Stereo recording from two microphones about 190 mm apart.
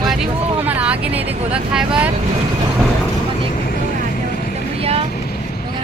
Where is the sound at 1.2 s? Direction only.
30° right (ahead or behind).